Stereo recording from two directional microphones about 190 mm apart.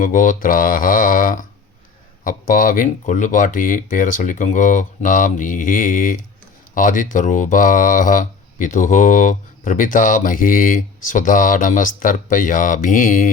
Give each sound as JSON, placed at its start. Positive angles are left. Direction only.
{"t": 0.0, "sound": "speech", "side_deg": 45}